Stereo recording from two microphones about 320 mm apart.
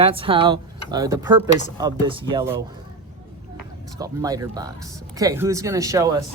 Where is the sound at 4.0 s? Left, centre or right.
Centre.